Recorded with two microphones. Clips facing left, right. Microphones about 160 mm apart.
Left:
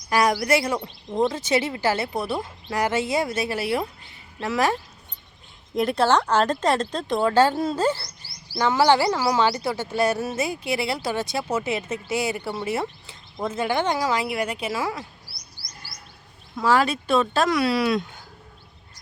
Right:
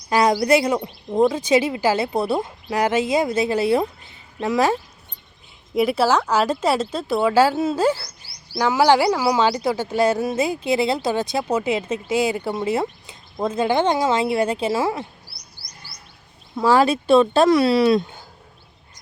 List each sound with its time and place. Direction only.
0.1 s speech: 20° right (ahead or behind)
5.7 s speech: 5° right (ahead or behind)
10.3 s speech: 25° right (ahead or behind)
16.6 s speech: 30° right (ahead or behind)